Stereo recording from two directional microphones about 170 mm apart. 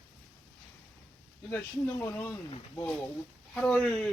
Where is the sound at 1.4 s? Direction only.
15° left (ahead or behind).